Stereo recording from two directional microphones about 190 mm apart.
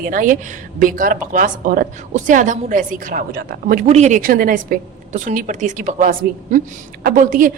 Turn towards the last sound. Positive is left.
turn(degrees=-45)  # may be behind; listen again after turning